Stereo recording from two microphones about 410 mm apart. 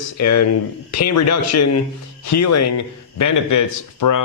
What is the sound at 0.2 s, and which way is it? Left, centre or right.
Speech, left.